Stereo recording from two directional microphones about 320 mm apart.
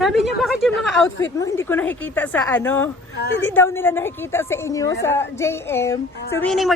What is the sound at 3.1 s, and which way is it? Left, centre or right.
Speech, left.